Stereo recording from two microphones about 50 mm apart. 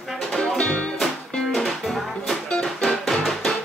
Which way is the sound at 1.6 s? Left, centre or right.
Centre.